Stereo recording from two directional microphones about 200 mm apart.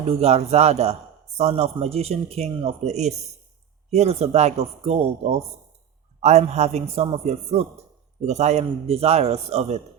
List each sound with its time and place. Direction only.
0.1 s a man's voice: 30° right (ahead or behind)